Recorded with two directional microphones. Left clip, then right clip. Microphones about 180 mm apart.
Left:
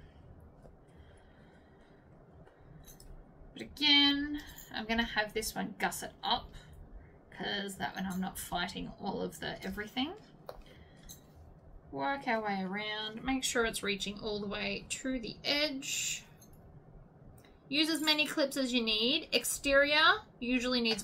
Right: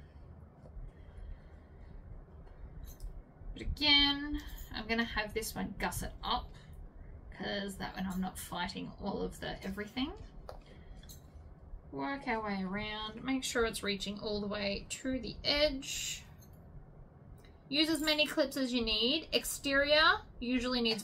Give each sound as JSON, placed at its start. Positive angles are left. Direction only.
{"t": 3.5, "sound": "speech", "side_deg": 20}
{"t": 11.9, "sound": "a woman's voice", "side_deg": 20}
{"t": 17.6, "sound": "a woman's voice", "side_deg": 15}